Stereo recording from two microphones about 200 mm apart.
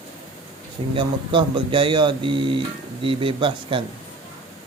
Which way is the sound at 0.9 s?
25° right (ahead or behind).